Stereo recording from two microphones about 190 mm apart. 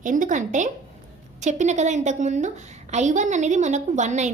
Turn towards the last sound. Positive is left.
turn(degrees=-40)  # may be behind; listen again after turning